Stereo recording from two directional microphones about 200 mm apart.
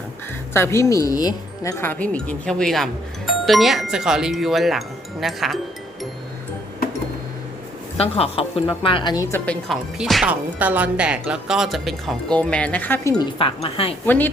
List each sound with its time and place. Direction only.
0.5 s speech: 15° left (ahead or behind)
7.9 s speech: 30° left (ahead or behind)
9.5 s speech: centre (ahead or behind)
13.4 s speech: 30° left (ahead or behind)